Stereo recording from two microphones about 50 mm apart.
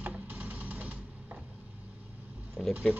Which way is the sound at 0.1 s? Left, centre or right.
Right.